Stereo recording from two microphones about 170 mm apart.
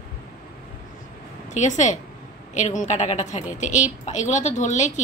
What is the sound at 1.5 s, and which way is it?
A woman's voice, 45° left (ahead or behind).